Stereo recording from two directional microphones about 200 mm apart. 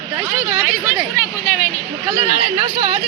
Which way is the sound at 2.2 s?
30° right (ahead or behind).